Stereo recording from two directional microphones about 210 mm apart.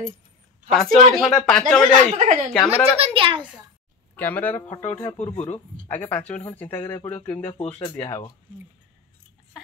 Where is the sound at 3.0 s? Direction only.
25° right (ahead or behind).